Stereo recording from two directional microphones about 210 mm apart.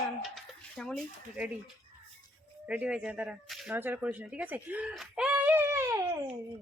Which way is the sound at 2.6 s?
5° right (ahead or behind).